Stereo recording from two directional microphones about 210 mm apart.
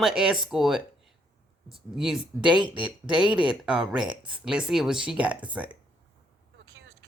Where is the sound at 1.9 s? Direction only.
Centre (ahead or behind).